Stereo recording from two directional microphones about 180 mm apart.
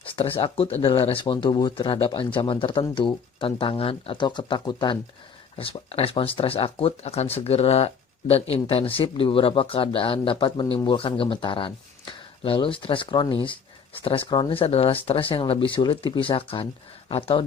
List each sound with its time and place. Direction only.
0.1 s speech: 30° left (ahead or behind)